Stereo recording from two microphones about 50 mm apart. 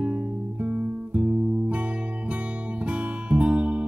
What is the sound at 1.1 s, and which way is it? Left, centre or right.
Guitar, right.